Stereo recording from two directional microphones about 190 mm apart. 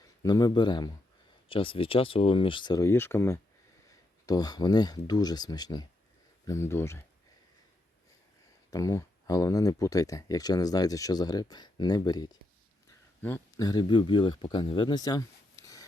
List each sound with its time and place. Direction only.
0.2 s speech: 20° left (ahead or behind)
8.7 s speech: 15° left (ahead or behind)